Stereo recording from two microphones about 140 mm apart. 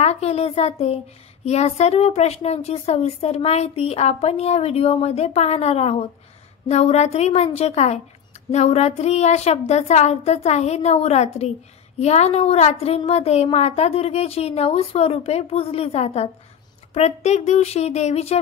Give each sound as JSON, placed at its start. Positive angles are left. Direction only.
{"t": 0.0, "sound": "speech", "side_deg": 50}